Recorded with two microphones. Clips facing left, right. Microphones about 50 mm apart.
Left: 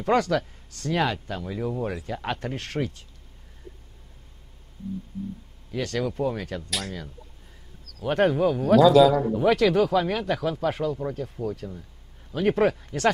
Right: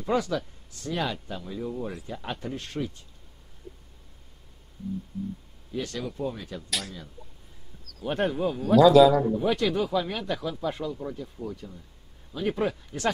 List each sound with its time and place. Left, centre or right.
0.0 s speech: left
5.7 s speech: left
8.0 s speech: left
8.7 s a man's voice: centre
9.3 s speech: left
11.4 s a man's voice: centre
12.3 s speech: left